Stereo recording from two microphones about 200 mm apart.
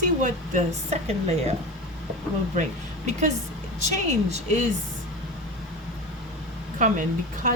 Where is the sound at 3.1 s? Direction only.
35° right (ahead or behind).